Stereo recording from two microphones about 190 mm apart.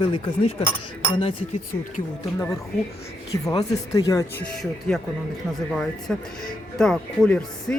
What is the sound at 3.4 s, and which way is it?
Speech, 20° left (ahead or behind).